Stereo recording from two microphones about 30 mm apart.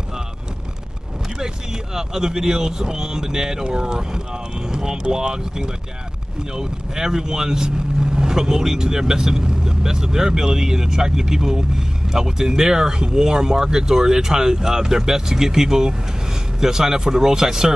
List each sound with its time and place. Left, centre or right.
2.0 s speech: centre
4.6 s speech: centre